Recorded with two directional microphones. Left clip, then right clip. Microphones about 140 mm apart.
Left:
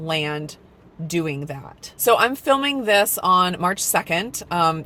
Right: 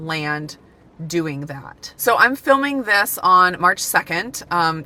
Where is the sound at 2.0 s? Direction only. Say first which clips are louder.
Right 2 dB; 15° left (ahead or behind).